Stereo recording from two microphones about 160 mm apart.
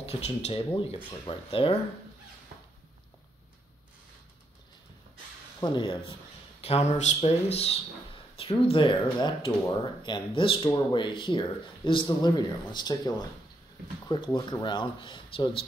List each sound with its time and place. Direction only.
0.0 s speech: 40° left (ahead or behind)
5.6 s speech: 30° left (ahead or behind)